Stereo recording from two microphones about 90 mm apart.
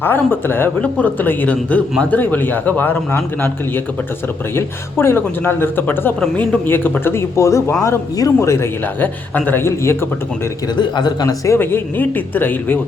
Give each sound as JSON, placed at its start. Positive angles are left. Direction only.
{"t": 0.0, "sound": "speech", "side_deg": 20}
{"t": 4.5, "sound": "speech", "side_deg": 25}
{"t": 10.8, "sound": "a man's voice", "side_deg": 55}
{"t": 11.5, "sound": "speech", "side_deg": 25}